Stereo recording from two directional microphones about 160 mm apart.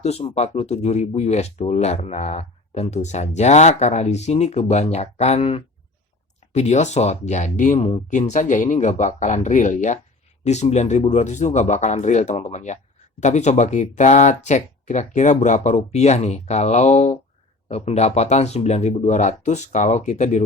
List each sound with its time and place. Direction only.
0.0 s speech: 40° left (ahead or behind)